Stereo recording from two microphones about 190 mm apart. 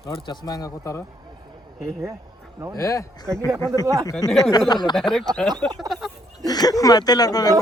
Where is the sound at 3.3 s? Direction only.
15° right (ahead or behind).